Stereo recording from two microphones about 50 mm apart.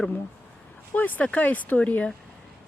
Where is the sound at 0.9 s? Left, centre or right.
Left.